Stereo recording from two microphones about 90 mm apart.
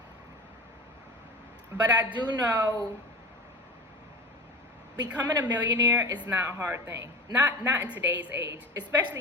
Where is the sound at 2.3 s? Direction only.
45° right (ahead or behind).